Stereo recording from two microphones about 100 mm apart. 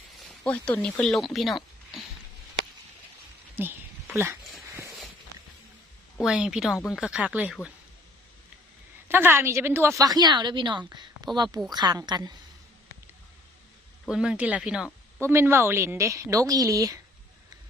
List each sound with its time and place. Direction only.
0.4 s speech: 10° left (ahead or behind)
3.5 s a sound: 20° right (ahead or behind)
6.2 s speech: 5° right (ahead or behind)
9.0 s a woman's voice: 20° right (ahead or behind)
10.2 s a woman's voice: 45° right (ahead or behind)
10.8 s a sound: 45° right (ahead or behind)
11.7 s a woman's voice: 45° right (ahead or behind)
14.1 s speech: 10° right (ahead or behind)
15.2 s a woman's voice: 25° right (ahead or behind)